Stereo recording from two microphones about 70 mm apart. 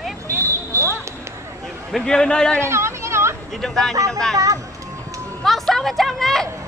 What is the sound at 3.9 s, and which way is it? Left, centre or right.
Speech, right.